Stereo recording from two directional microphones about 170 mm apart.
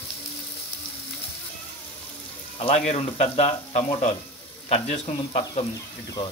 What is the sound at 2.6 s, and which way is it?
Speech, 40° left (ahead or behind).